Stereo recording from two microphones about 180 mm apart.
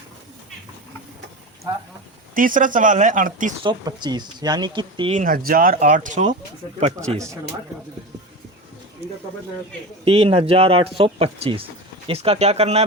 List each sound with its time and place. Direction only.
2.3 s speech: 50° right (ahead or behind)
3.6 s speech: 25° right (ahead or behind)
5.1 s speech: 50° right (ahead or behind)
10.0 s speech: 30° right (ahead or behind)